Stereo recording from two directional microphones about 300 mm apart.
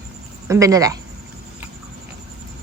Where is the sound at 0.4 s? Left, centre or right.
Centre.